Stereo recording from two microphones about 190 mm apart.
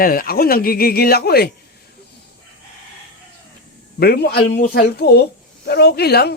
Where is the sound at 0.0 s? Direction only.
50° left (ahead or behind).